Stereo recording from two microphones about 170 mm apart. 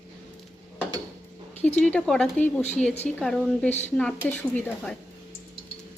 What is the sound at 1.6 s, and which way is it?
Speech, 10° left (ahead or behind).